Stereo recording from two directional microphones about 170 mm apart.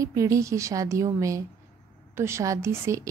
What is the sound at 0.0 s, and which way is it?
A woman's voice, 20° right (ahead or behind).